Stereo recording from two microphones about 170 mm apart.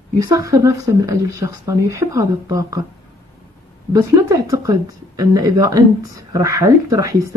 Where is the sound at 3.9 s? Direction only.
20° right (ahead or behind).